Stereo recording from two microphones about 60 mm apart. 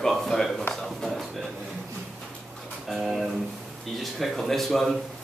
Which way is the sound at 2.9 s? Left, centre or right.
Centre.